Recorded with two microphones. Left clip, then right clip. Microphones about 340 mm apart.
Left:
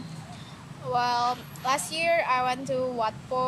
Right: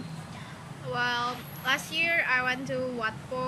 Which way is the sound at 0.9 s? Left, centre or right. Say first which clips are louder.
Left 4 dB; centre.